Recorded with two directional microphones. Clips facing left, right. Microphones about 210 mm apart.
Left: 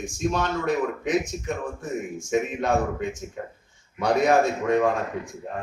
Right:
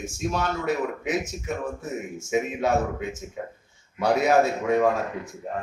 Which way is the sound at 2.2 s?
5° right (ahead or behind).